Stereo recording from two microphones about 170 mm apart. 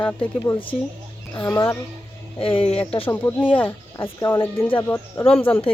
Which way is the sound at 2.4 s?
30° left (ahead or behind).